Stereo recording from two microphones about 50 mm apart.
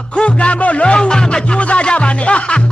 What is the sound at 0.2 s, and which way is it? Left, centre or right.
Music, left.